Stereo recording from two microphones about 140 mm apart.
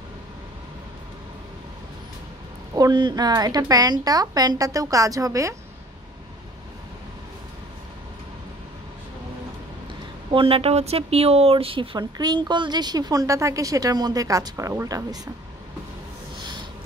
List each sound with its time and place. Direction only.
2.7 s speech: 30° right (ahead or behind)
10.3 s speech: 40° right (ahead or behind); by 15.1 s 20° right (ahead or behind)